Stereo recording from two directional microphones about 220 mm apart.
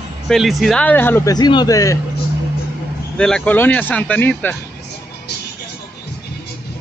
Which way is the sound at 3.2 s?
5° left (ahead or behind).